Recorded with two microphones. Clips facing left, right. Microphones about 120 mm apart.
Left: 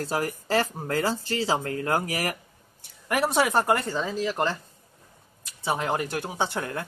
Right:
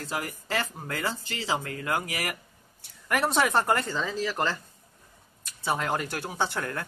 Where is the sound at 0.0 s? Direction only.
35° left (ahead or behind).